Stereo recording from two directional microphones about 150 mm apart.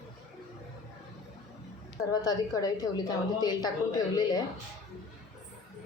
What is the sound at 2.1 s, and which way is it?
A woman's voice, 25° left (ahead or behind).